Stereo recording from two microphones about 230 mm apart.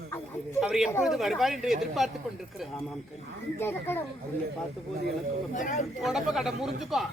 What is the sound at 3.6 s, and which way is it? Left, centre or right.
Speech, centre.